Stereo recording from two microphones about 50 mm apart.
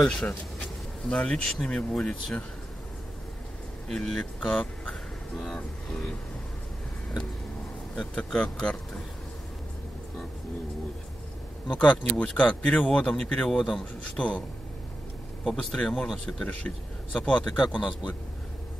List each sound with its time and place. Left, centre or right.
0.0 s speech: centre
0.6 s bee: left
1.4 s speech: centre
1.9 s speech: left
3.9 s speech: centre
4.5 s speech: left
5.4 s speech: centre
7.9 s speech: centre
11.7 s speech: left
13.5 s speech: centre
14.0 s speech: left
15.5 s speech: centre
16.1 s speech: centre
16.4 s speech: left